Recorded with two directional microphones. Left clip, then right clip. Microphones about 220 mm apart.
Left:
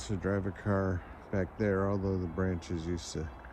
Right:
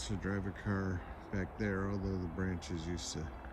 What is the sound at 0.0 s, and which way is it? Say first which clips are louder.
Speech: left 6 dB; 5° right (ahead or behind).